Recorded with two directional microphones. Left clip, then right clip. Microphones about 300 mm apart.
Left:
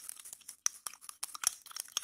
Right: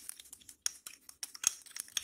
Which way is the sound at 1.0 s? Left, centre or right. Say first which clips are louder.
Right 1 dB; left.